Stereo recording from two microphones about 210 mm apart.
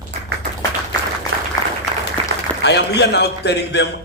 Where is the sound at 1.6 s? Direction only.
15° left (ahead or behind).